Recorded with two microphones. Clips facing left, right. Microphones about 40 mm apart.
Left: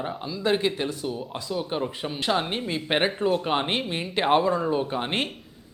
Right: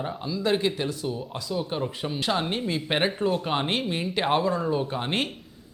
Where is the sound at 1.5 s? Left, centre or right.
Centre.